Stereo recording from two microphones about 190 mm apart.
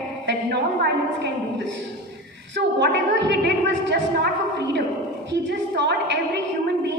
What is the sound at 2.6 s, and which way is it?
A woman's voice, 65° right (ahead or behind).